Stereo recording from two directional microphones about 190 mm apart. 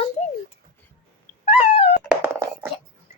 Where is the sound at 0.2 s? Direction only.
35° left (ahead or behind).